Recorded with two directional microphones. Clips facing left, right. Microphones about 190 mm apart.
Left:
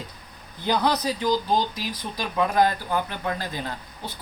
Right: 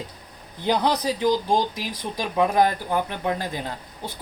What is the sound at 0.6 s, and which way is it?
Speech, 20° right (ahead or behind).